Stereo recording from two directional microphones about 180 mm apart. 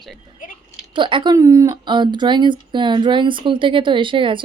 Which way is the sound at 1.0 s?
25° right (ahead or behind).